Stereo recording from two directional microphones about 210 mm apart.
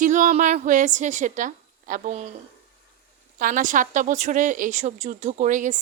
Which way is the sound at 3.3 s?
40° right (ahead or behind).